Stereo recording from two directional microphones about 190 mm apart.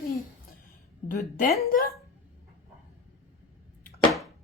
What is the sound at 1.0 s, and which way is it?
Speech, 50° left (ahead or behind).